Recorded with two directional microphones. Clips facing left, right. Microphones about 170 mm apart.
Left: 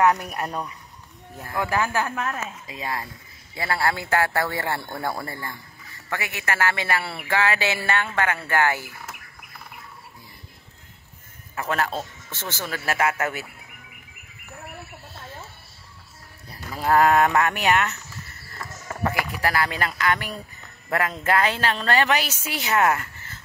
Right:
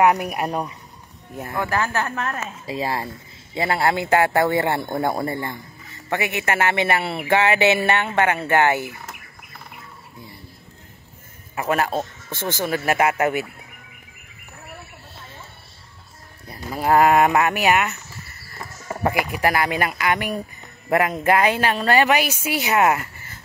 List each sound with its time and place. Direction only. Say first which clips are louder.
0.0 s speech: right 3 dB; 15° right (ahead or behind)
0.5 s a man's voice: right 5 dB; 25° right (ahead or behind)
1.6 s a woman's voice: even; 10° left (ahead or behind)
2.6 s a woman's voice: right 6 dB; 30° right (ahead or behind)
11.5 s speech: right 4 dB; 10° right (ahead or behind)
16.4 s speech: right 3 dB; 15° right (ahead or behind)